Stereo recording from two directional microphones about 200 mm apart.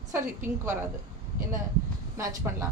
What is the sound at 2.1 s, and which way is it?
Speech, 15° right (ahead or behind).